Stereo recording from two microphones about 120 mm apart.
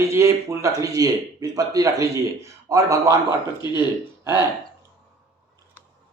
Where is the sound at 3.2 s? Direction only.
40° left (ahead or behind).